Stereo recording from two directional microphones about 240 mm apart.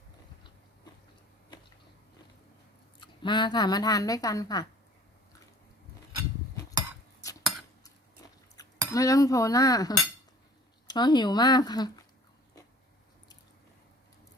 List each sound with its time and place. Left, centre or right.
3.0 s a woman's voice: centre
7.2 s a sound: centre
8.9 s a woman's voice: centre